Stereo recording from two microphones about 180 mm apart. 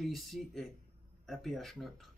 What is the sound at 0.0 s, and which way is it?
Speech, centre (ahead or behind).